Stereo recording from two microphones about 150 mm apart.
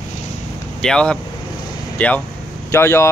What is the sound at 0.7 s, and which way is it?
Speech, 5° left (ahead or behind).